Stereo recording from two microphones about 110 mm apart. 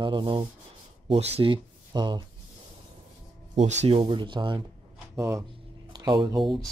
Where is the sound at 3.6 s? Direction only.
90° right.